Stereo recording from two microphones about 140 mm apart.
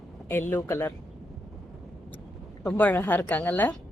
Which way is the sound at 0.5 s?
15° left (ahead or behind).